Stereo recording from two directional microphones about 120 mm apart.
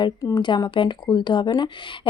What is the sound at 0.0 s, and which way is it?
Speech, 40° left (ahead or behind).